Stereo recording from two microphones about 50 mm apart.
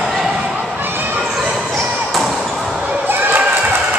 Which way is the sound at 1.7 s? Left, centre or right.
Centre.